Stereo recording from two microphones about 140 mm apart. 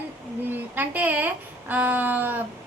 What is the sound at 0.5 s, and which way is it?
A woman's voice, 15° right (ahead or behind).